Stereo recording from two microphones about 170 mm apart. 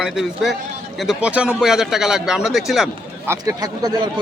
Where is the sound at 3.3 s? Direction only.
20° right (ahead or behind).